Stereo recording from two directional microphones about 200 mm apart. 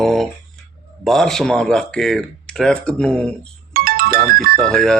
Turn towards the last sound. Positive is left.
turn(degrees=0)  # may be behind; listen again after turning